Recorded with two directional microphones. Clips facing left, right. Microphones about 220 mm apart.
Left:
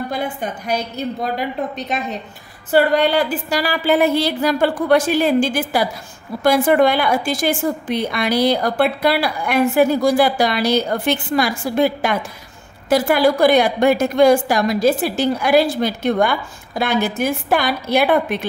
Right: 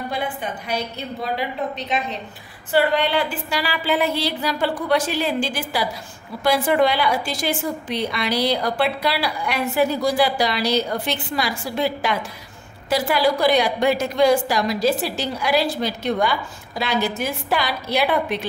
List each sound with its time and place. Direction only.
0.1 s a woman's voice: 45° left (ahead or behind)